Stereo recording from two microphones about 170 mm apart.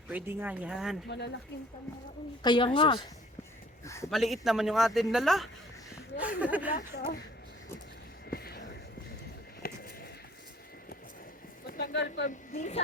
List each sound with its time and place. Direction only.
0.1 s speech: 10° right (ahead or behind)
2.4 s a woman's voice: 30° left (ahead or behind)
3.8 s a man's voice: 15° left (ahead or behind)
4.1 s a man's voice: centre (ahead or behind)
6.9 s speech: 65° left (ahead or behind)
8.3 s a sound: 65° left (ahead or behind)
11.6 s speech: 75° left (ahead or behind); by 12.3 s 90° left
12.5 s speech: 45° left (ahead or behind)